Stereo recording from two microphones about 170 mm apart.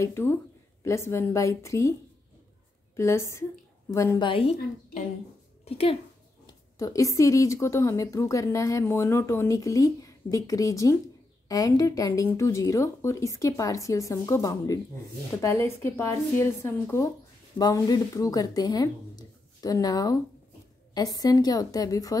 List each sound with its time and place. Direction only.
0.0 s speech: 15° left (ahead or behind)
3.0 s speech: 15° left (ahead or behind)
5.7 s a woman's voice: 35° left (ahead or behind)
6.4 s a woman's voice: 20° left (ahead or behind)